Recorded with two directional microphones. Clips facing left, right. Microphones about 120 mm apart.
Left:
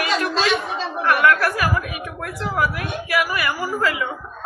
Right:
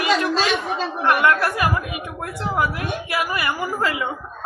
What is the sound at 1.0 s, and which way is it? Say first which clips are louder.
A woman's voice: left 1 dB; 25° right (ahead or behind).